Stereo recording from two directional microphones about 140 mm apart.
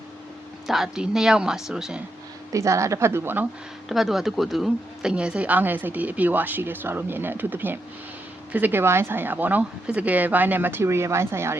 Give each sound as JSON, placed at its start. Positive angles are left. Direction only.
{"t": 0.7, "sound": "a woman's voice", "side_deg": -5}
{"t": 2.5, "sound": "a woman's voice", "side_deg": -20}
{"t": 3.8, "sound": "speech", "side_deg": 0}